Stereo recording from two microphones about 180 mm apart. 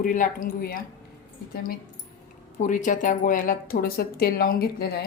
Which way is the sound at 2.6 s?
45° left (ahead or behind).